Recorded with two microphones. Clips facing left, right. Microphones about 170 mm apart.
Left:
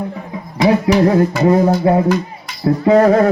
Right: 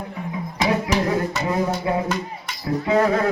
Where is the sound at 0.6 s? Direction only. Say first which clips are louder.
Left 9 dB; 40° left (ahead or behind).